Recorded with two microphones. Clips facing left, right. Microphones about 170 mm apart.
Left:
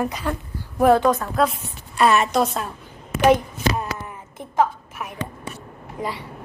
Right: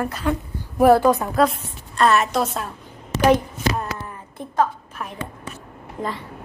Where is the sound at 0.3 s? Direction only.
10° right (ahead or behind).